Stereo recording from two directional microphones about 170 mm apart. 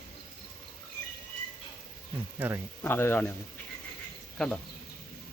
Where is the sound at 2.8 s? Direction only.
15° left (ahead or behind).